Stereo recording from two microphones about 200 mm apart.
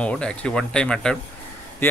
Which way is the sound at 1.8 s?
10° left (ahead or behind).